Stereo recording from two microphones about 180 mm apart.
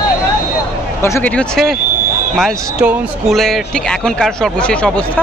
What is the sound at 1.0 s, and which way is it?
Speech, 15° left (ahead or behind).